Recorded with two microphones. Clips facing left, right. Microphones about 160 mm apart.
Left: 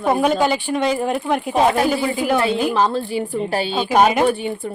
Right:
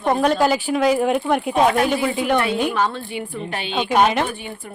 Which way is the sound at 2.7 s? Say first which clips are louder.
Left 4 dB; 30° left (ahead or behind).